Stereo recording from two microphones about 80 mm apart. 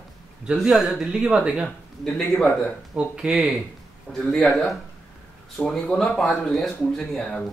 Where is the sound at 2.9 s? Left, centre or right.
Centre.